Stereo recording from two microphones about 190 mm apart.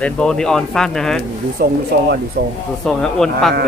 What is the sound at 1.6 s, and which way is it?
Speech, 55° right (ahead or behind).